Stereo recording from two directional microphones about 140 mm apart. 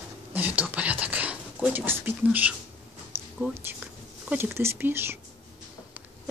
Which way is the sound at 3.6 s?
15° right (ahead or behind).